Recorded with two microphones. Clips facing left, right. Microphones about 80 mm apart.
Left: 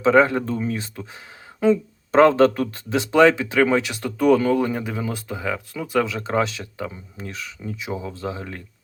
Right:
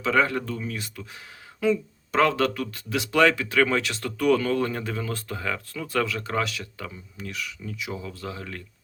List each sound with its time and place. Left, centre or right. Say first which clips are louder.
0.0 s speech: left 7 dB; left